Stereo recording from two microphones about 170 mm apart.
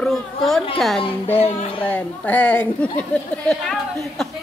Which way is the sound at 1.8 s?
10° left (ahead or behind).